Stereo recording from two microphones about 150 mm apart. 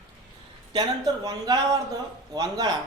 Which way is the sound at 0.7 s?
25° right (ahead or behind).